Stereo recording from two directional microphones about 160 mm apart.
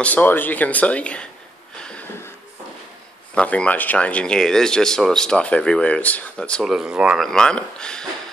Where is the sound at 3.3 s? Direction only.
10° left (ahead or behind).